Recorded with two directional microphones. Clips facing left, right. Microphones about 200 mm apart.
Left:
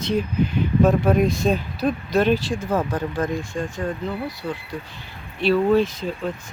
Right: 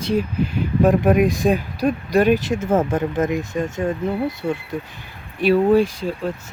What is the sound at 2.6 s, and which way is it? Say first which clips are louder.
Speech: right 4 dB; 25° right (ahead or behind).